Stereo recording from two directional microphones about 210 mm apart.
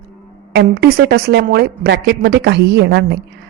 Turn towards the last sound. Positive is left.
turn(degrees=-55)  # may be behind; listen again after turning